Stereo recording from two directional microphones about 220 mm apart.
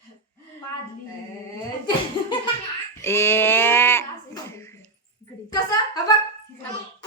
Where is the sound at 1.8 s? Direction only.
20° left (ahead or behind).